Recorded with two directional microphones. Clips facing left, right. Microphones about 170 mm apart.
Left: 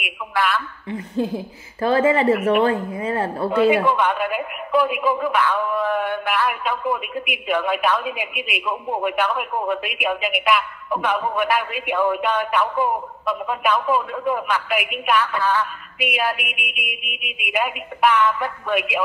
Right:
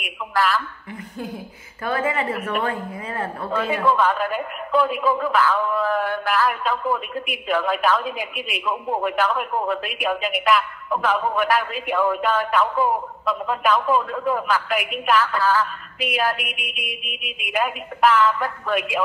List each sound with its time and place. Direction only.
0.8 s a woman's voice: 25° left (ahead or behind)
3.5 s a man's voice: 15° left (ahead or behind)